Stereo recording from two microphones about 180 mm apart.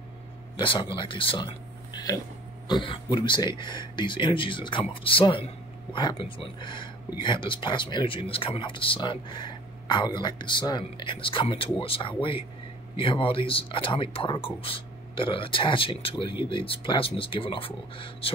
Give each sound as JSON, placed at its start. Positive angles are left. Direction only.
{"t": 0.6, "sound": "speech", "side_deg": 25}